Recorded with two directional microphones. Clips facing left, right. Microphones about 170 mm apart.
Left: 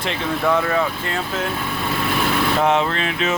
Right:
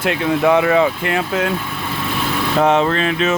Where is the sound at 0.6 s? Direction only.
75° right (ahead or behind).